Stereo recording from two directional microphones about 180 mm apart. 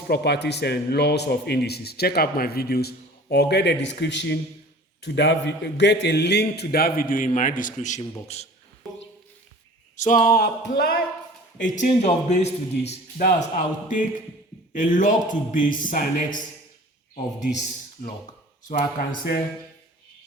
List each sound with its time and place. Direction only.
0.1 s speech: 65° left (ahead or behind); by 8.0 s 45° left (ahead or behind)
10.0 s speech: 45° left (ahead or behind)
11.6 s a man's voice: 45° left (ahead or behind)
18.0 s speech: 55° left (ahead or behind)